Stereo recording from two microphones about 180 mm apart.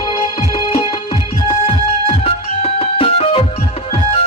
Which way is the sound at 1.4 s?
30° left (ahead or behind).